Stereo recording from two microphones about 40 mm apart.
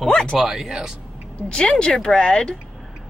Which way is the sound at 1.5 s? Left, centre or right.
Left.